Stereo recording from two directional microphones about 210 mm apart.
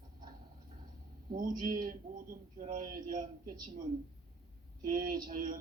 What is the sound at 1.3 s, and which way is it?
A man's voice, 40° right (ahead or behind).